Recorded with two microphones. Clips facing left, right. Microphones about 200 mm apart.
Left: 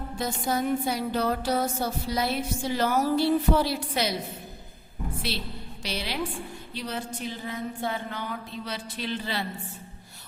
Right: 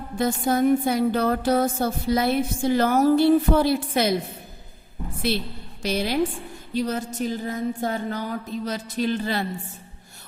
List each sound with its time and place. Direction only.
0.2 s music: 55° right (ahead or behind)
5.8 s music: 45° right (ahead or behind)